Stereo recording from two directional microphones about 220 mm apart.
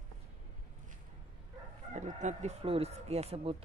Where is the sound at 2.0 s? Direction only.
35° right (ahead or behind).